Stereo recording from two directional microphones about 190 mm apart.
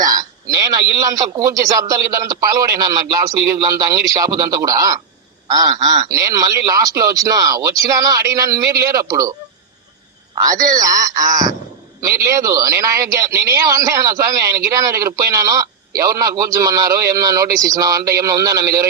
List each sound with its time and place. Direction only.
0.0 s a man's voice: 20° right (ahead or behind)
10.4 s a man's voice: 20° right (ahead or behind)